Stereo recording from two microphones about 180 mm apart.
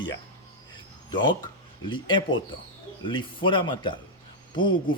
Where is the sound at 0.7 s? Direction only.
25° left (ahead or behind).